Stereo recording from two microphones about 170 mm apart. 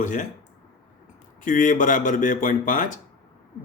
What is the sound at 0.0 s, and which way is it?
Speech, 50° left (ahead or behind).